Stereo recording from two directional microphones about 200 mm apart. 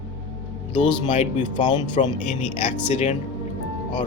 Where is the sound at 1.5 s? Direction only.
20° left (ahead or behind).